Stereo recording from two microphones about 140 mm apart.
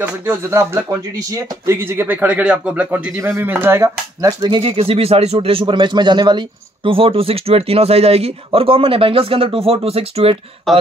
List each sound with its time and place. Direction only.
0.0 s a man's voice: 15° right (ahead or behind); by 10.3 s 45° right (ahead or behind)
10.7 s speech: centre (ahead or behind)